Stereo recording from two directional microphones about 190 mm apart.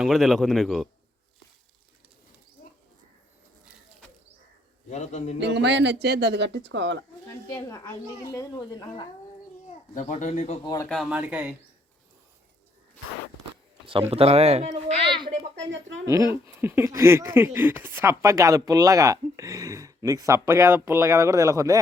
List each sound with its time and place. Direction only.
0.0 s speech: centre (ahead or behind)
4.9 s speech: 40° left (ahead or behind)
5.4 s speech: 65° right (ahead or behind)
7.4 s speech: 15° left (ahead or behind)
9.9 s speech: 40° left (ahead or behind)
10.8 s speech: centre (ahead or behind)
14.1 s speech: 30° right (ahead or behind)
16.0 s speech: 15° right (ahead or behind)